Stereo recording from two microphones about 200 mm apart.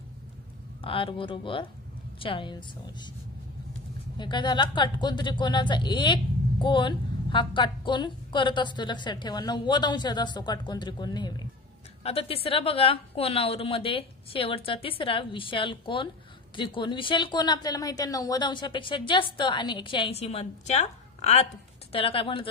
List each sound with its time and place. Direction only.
0.8 s speech: 25° left (ahead or behind)
4.2 s speech: 20° left (ahead or behind)